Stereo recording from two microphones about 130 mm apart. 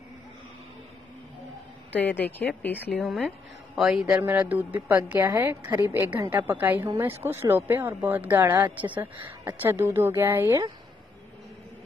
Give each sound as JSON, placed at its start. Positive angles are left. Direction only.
{"t": 1.9, "sound": "speech", "side_deg": 15}
{"t": 3.0, "sound": "speech", "side_deg": 0}
{"t": 4.1, "sound": "speech", "side_deg": -15}